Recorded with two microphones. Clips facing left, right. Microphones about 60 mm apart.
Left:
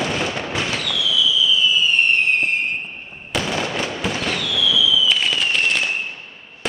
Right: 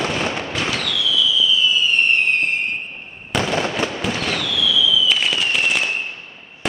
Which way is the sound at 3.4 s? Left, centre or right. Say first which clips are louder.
Right 3 dB; right.